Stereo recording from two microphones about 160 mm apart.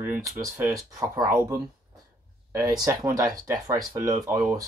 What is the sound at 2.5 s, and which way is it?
Speech, 20° right (ahead or behind).